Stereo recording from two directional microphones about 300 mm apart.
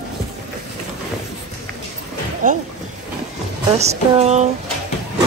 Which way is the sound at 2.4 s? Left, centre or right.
Right.